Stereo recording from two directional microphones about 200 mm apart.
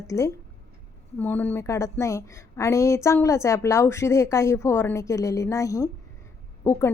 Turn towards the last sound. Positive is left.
turn(degrees=10)  # may be behind; listen again after turning